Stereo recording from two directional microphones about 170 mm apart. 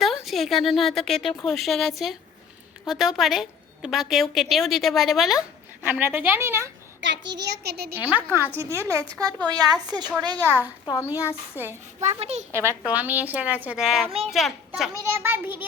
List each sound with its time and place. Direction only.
0.3 s a woman's voice: centre (ahead or behind)
7.0 s a child's voice: 90° right; by 7.9 s 70° right (ahead or behind)
7.9 s a child's voice: 10° right (ahead or behind)
10.8 s a woman's voice: 20° left (ahead or behind)
11.5 s a child's voice: 10° right (ahead or behind)
12.0 s a child's voice: 40° right (ahead or behind)
12.5 s a child's voice: 15° right (ahead or behind)
15.1 s a child's voice: 10° right (ahead or behind)